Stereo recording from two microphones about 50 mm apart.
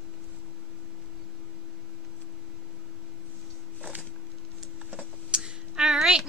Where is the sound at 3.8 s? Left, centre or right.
Right.